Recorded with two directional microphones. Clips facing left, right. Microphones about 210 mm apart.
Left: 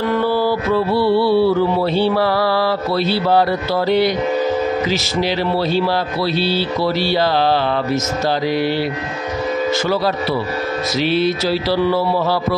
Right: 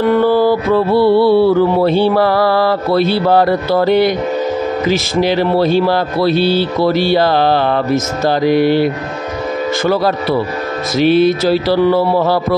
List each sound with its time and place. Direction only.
0.1 s mantra: 50° right (ahead or behind)
4.8 s speech: 50° right (ahead or behind)
11.0 s speech: 50° right (ahead or behind)